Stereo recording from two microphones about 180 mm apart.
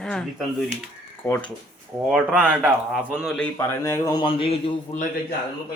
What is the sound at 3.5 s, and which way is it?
A man's voice, 15° left (ahead or behind).